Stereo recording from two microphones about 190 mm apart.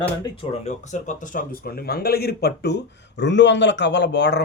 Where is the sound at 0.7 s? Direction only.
40° left (ahead or behind).